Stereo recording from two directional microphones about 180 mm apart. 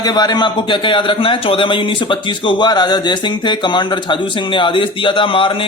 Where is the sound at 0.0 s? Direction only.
20° left (ahead or behind).